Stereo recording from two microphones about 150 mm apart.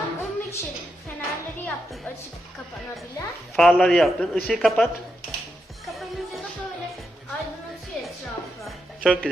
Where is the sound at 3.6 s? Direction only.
5° left (ahead or behind).